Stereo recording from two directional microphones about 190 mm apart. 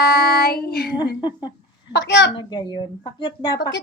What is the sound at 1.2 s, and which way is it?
Babbling, 25° left (ahead or behind).